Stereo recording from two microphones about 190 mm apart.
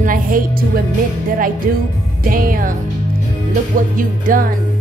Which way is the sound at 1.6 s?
45° right (ahead or behind).